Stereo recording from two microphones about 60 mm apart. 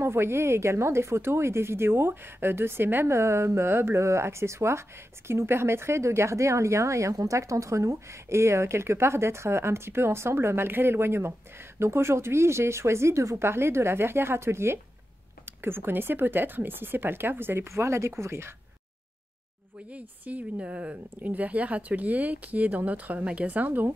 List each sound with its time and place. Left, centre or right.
0.0 s speech: right
19.9 s speech: right